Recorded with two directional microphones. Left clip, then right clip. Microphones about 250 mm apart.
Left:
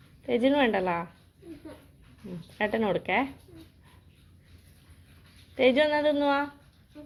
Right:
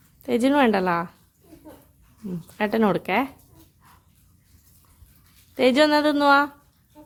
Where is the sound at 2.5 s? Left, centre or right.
Right.